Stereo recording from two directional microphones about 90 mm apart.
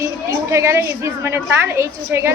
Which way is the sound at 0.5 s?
30° right (ahead or behind).